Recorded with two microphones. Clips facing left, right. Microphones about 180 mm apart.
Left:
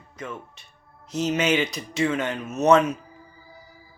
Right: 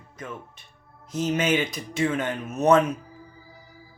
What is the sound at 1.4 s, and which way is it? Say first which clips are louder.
Speech: left 1 dB; 50° right (ahead or behind).